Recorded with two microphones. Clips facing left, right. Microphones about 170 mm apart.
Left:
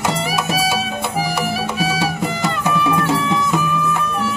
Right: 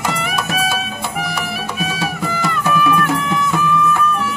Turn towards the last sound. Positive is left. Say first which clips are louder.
# right 1 dB
turn(degrees=25)  # may be behind; listen again after turning